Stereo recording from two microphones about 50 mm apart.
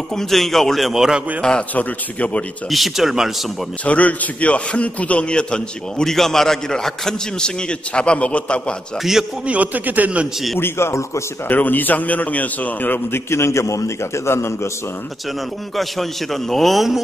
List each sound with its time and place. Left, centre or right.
0.1 s a man's voice: centre
1.8 s a man's voice: left
2.7 s a man's voice: centre
3.8 s a man's voice: left
9.5 s a man's voice: right
10.6 s a man's voice: left
11.4 s a man's voice: left
13.1 s a man's voice: left
15.7 s a man's voice: centre